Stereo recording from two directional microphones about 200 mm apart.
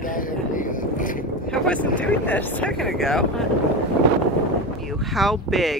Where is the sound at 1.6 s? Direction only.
5° left (ahead or behind).